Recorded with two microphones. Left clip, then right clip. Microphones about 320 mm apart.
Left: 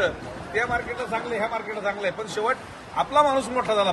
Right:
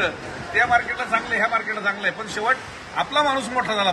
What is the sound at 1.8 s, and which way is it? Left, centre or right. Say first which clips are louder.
Speech: right 3 dB; centre.